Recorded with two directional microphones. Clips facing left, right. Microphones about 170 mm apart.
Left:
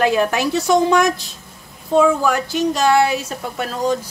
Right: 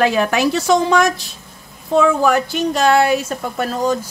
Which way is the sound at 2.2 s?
60° right (ahead or behind).